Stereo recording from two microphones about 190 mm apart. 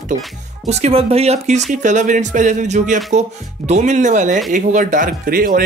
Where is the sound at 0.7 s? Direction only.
35° right (ahead or behind).